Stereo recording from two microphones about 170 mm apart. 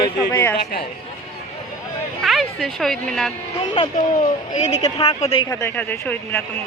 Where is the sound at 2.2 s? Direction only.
Centre (ahead or behind).